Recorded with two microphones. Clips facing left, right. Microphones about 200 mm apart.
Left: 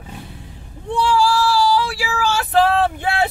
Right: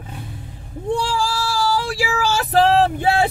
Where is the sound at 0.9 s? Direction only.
40° right (ahead or behind).